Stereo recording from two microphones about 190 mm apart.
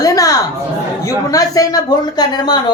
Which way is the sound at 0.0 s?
20° left (ahead or behind).